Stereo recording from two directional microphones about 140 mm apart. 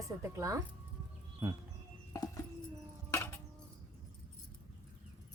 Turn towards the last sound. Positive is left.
turn(degrees=15)  # may be behind; listen again after turning